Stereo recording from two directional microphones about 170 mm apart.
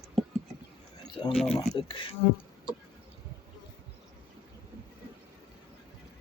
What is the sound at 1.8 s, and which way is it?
Speech, 30° left (ahead or behind).